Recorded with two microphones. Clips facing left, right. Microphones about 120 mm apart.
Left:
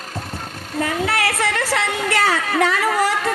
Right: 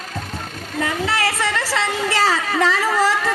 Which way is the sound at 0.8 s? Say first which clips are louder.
Left 1 dB; 55° left (ahead or behind).